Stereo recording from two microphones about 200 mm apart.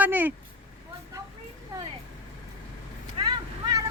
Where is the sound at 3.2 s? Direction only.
20° right (ahead or behind).